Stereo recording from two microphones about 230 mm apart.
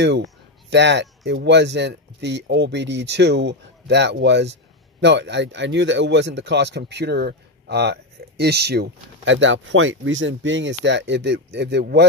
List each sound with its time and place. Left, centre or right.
0.0 s speech: right